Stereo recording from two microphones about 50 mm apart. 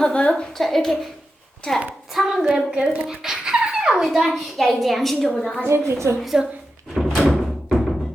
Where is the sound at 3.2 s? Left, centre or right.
Centre.